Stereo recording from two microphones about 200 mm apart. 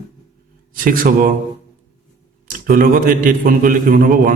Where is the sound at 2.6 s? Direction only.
45° right (ahead or behind).